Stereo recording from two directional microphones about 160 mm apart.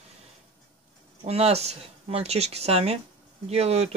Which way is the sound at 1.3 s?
40° right (ahead or behind).